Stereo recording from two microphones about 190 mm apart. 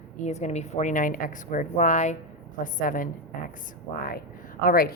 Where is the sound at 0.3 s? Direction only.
35° left (ahead or behind).